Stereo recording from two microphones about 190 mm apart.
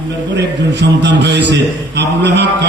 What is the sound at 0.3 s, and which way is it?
A man's voice, 65° right (ahead or behind).